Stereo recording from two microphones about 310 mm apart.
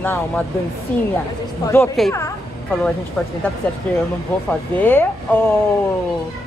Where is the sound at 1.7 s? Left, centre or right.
Centre.